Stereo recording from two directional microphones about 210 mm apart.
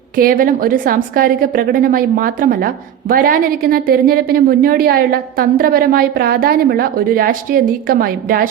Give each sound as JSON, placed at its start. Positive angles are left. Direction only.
{"t": 0.2, "sound": "a woman's voice", "side_deg": -45}